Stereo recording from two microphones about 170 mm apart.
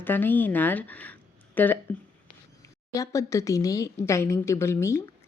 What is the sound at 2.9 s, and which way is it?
A woman's voice, 20° left (ahead or behind).